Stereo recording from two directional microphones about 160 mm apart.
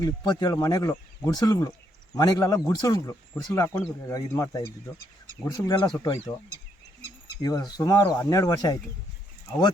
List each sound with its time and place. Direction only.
0.0 s speech: 25° left (ahead or behind)
7.4 s speech: 20° left (ahead or behind)